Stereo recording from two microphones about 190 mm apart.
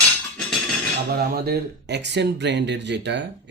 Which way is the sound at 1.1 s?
55° right (ahead or behind).